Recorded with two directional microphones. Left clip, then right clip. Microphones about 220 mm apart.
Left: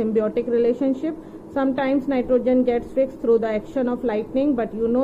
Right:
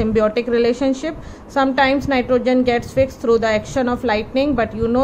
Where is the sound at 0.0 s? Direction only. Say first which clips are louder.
Right 4 dB; 15° right (ahead or behind).